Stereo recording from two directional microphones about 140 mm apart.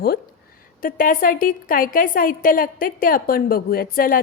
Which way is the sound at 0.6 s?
90° left.